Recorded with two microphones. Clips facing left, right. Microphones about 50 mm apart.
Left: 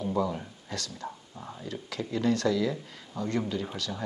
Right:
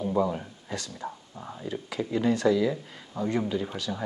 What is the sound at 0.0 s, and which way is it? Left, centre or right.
Speech, centre.